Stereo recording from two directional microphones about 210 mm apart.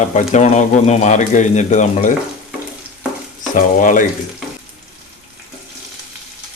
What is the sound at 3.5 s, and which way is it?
Speech, 40° left (ahead or behind).